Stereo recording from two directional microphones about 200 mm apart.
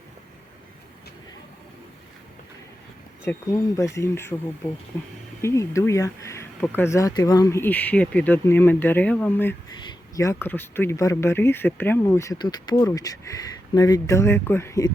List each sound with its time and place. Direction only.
3.2 s speech: 15° left (ahead or behind)
5.4 s speech: 15° left (ahead or behind)
9.7 s a sound: 20° left (ahead or behind)
10.4 s speech: 10° left (ahead or behind)